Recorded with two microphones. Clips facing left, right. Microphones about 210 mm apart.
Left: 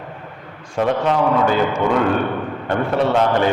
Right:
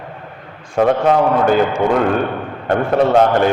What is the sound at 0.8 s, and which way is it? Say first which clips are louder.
A man's voice: right 4 dB; 50° right (ahead or behind).